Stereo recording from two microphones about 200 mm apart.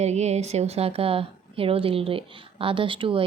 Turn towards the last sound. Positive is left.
turn(degrees=-25)  # may be behind; listen again after turning